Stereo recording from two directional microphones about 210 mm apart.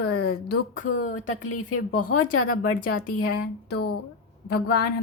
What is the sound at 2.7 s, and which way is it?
Speech, 40° left (ahead or behind).